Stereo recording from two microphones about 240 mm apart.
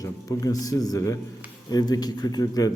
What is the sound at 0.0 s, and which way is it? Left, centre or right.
A man's voice, centre.